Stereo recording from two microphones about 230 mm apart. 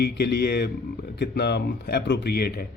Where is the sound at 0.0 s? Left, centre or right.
Left.